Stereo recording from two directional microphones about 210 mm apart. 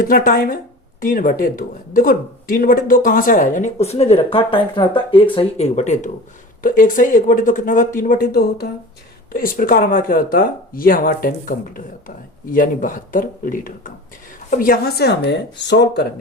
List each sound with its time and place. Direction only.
0.0 s speech: 40° left (ahead or behind)